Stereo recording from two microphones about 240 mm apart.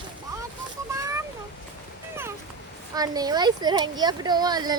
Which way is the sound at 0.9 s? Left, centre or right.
Centre.